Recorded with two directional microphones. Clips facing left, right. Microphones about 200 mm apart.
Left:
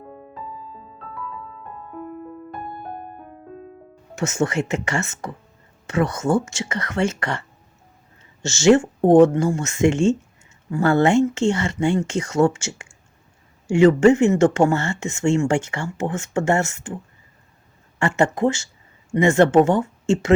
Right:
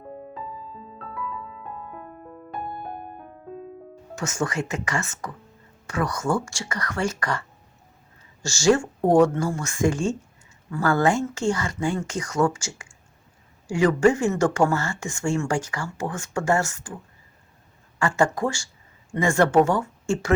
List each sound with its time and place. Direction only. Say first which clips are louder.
4.1 s speech: left 5 dB; 25° left (ahead or behind)
18.0 s speech: left 3 dB; 25° left (ahead or behind)